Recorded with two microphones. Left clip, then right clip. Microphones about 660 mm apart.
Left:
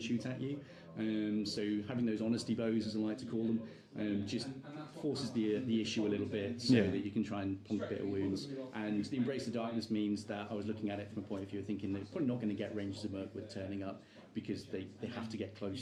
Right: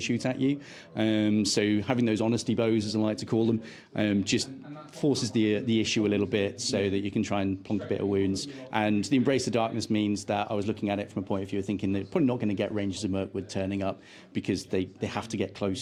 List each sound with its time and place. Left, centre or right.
0.0 s speech: right